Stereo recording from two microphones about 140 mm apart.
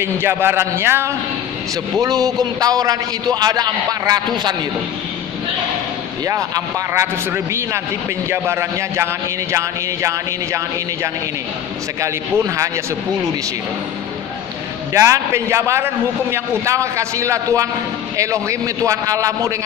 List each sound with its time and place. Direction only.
0.0 s a man's voice: 15° right (ahead or behind)
6.2 s speech: 25° right (ahead or behind)
14.9 s speech: 20° right (ahead or behind)